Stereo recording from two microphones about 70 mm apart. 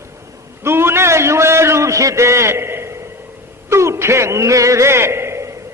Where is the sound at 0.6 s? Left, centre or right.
Right.